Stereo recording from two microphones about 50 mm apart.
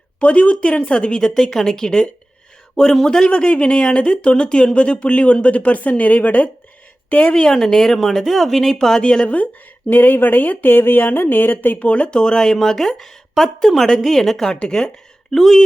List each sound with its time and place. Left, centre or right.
0.2 s speech: left
7.3 s speech: centre
9.9 s speech: left
11.8 s speech: left; by 15.6 s centre